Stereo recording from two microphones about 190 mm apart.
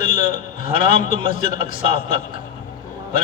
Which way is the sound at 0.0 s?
30° right (ahead or behind).